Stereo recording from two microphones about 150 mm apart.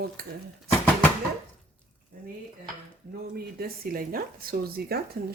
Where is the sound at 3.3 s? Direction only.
85° right.